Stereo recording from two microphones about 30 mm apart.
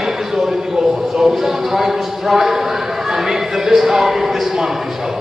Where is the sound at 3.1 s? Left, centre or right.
Centre.